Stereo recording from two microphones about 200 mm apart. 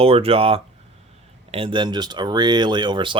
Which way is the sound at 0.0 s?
30° right (ahead or behind).